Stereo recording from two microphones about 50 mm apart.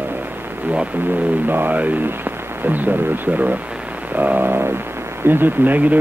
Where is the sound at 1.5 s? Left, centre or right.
Right.